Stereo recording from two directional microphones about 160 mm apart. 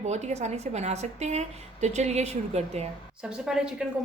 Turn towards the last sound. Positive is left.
turn(degrees=-5)  # may be behind; listen again after turning